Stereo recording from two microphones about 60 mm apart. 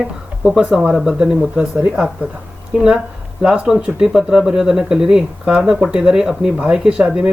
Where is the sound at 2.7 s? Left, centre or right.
Centre.